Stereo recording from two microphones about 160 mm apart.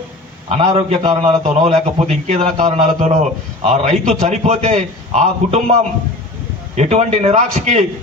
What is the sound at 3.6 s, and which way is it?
A man's voice, 45° right (ahead or behind).